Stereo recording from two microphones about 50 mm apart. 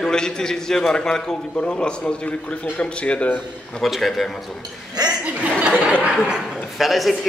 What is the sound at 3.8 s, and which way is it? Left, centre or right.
Speech, centre.